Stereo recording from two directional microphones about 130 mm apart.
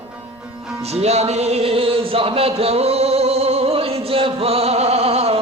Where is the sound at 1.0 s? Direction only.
55° right (ahead or behind).